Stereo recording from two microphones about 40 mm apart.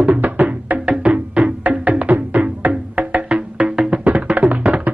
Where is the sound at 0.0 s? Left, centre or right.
Right.